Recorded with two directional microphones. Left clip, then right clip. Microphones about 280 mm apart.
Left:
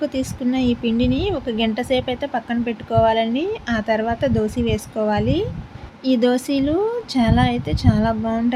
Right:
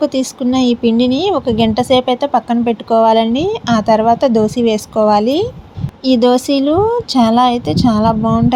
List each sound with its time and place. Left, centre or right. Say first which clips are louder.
0.0 s speech: right 7 dB; right